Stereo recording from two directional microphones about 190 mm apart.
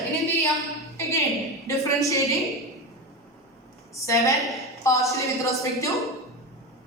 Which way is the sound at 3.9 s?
15° left (ahead or behind).